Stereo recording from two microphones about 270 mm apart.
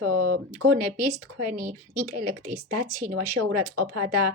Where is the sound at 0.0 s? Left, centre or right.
Right.